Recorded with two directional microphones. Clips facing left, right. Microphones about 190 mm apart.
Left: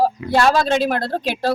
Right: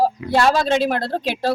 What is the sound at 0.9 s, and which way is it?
Speech, 25° right (ahead or behind).